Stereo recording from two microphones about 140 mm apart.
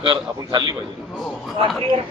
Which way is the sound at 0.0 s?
35° right (ahead or behind).